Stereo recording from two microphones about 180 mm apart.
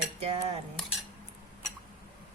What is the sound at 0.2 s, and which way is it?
Cutlery, 35° right (ahead or behind).